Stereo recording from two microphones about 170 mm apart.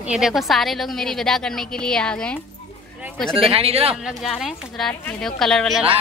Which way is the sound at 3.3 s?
30° right (ahead or behind).